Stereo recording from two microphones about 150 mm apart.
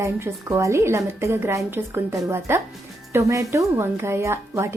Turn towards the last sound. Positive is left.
turn(degrees=-15)  # may be behind; listen again after turning